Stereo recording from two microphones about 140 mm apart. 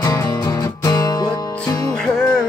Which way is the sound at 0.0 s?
25° left (ahead or behind).